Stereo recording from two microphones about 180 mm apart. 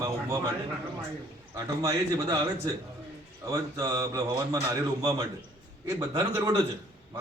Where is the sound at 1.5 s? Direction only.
20° right (ahead or behind).